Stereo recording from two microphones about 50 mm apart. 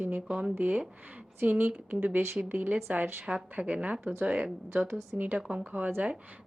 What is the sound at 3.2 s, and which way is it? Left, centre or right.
Speech, centre.